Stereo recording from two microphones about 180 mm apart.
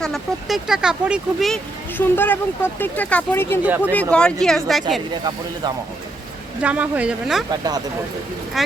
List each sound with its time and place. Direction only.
0.0 s speech: centre (ahead or behind)
3.6 s speech: 10° right (ahead or behind)
4.1 s a woman's voice: 5° left (ahead or behind)
5.1 s speech: 25° right (ahead or behind)
6.6 s speech: 5° right (ahead or behind)
8.6 s speech: centre (ahead or behind)